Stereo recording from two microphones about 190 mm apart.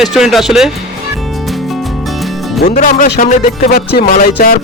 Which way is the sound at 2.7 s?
45° left (ahead or behind).